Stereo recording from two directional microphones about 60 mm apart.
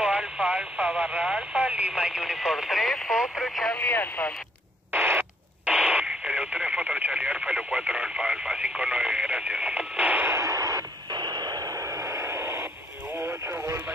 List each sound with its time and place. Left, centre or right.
0.6 s speech: centre
1.2 s speech: centre
2.0 s speech: centre
3.2 s radio: centre
3.7 s speech: left
4.9 s radio: right
5.7 s radio: centre
8.7 s speech: right
10.4 s a sound: right
11.4 s radio: right
13.3 s vehicle: centre